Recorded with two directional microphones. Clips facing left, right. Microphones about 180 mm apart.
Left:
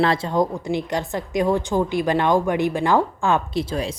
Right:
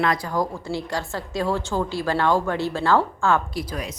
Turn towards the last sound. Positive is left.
turn(degrees=30)  # may be behind; listen again after turning